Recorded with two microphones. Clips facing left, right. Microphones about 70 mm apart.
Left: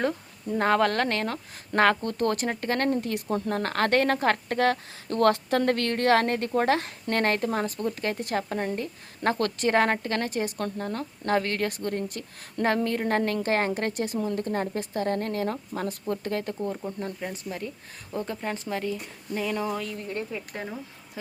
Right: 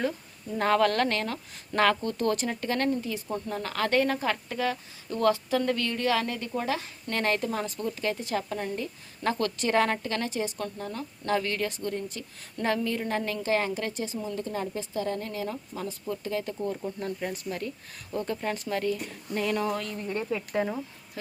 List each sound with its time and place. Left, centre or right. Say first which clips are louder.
0.5 s a woman's voice: left 1 dB; left
2.9 s a woman's voice: left 4 dB; left
7.1 s a woman's voice: left 3 dB; left
8.2 s a woman's voice: left 2 dB; left
8.4 s a woman's voice: left 3 dB; left
12.6 s a woman's voice: left 3 dB; left
17.3 s speech: right 1 dB; left
20.1 s speech: right 2 dB; centre